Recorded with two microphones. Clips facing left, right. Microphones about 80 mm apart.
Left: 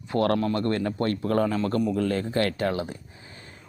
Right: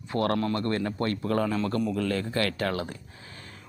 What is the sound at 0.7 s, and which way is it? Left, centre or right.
Speech, right.